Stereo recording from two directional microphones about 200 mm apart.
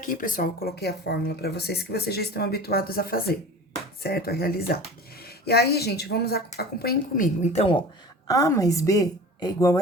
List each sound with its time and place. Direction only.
0.0 s speech: 40° left (ahead or behind)
7.4 s speech: 30° left (ahead or behind)
8.3 s a woman's voice: 15° left (ahead or behind)